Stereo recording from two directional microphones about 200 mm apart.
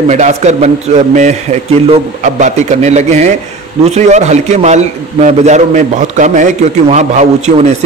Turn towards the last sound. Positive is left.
turn(degrees=-35)  # may be behind; listen again after turning